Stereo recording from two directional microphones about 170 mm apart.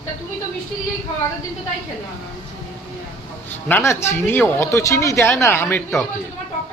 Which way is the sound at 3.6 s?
15° left (ahead or behind).